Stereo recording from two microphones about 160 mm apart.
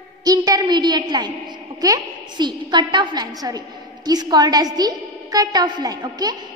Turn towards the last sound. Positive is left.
turn(degrees=-25)  # may be behind; listen again after turning